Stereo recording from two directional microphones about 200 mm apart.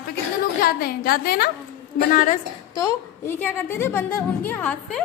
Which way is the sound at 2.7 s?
15° left (ahead or behind).